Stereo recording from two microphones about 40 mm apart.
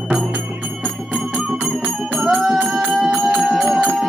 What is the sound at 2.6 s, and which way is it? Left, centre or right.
Music, centre.